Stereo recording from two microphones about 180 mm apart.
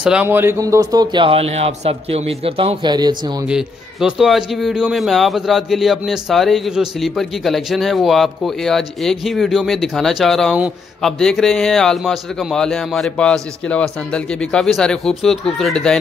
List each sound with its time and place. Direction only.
0.0 s speech: 5° right (ahead or behind); by 3.4 s 25° right (ahead or behind)
3.4 s a man's voice: 5° right (ahead or behind)